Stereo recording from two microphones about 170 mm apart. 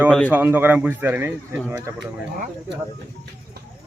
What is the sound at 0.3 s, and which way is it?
Speech, 10° right (ahead or behind).